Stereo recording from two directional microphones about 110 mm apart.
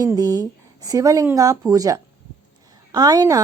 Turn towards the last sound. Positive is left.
turn(degrees=-35)  # may be behind; listen again after turning